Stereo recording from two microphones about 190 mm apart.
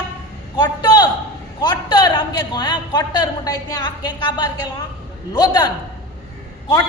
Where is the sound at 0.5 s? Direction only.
25° left (ahead or behind).